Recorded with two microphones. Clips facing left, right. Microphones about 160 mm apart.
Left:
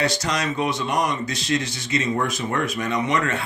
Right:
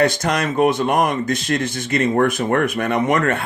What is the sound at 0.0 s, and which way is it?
Speech, 55° right (ahead or behind).